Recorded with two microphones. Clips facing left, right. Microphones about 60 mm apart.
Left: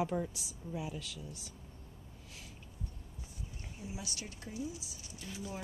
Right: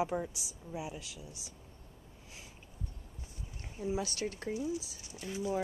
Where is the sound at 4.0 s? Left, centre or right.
Right.